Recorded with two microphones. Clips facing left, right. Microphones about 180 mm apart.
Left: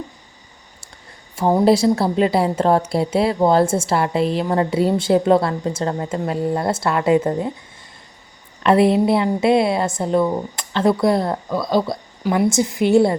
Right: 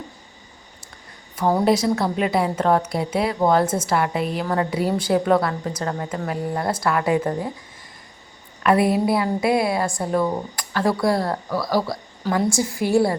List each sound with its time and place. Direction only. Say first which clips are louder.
1.6 s a woman's voice: left 7 dB; 30° left (ahead or behind)
8.6 s a woman's voice: left 4 dB; 25° left (ahead or behind)